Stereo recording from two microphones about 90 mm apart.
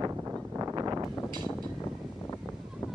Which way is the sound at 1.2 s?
55° right (ahead or behind).